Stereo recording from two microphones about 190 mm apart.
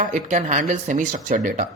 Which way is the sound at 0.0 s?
40° right (ahead or behind).